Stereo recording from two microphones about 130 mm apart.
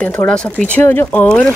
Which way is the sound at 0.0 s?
15° left (ahead or behind).